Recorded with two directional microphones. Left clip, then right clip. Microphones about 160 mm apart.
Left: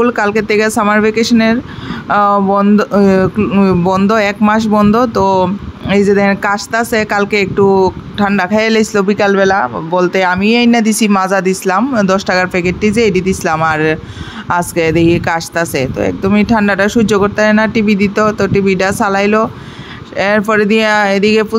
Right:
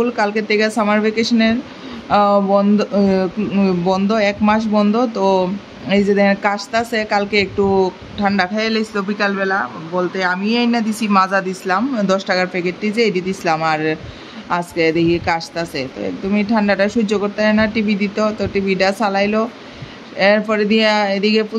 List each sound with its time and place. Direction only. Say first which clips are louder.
0.0 s speech: left 5 dB; 50° left (ahead or behind)